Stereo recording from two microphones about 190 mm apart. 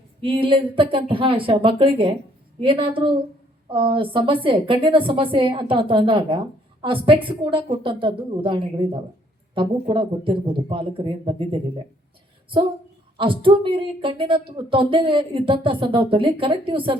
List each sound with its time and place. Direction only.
0.2 s speech: 30° right (ahead or behind)
13.1 s speech: 25° right (ahead or behind)